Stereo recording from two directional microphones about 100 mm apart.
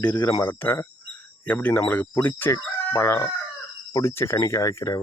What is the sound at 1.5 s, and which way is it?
Speech, 15° left (ahead or behind).